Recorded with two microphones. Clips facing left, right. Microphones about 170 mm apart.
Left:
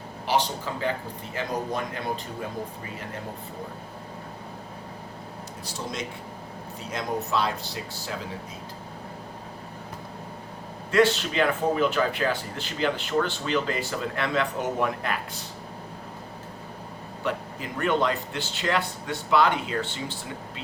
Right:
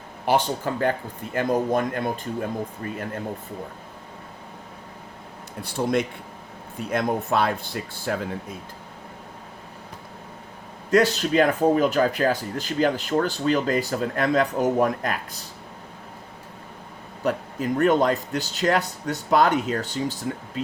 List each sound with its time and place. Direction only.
0.3 s speech: 50° right (ahead or behind)
5.6 s speech: 55° right (ahead or behind)
10.9 s speech: 40° right (ahead or behind)
17.2 s speech: 45° right (ahead or behind)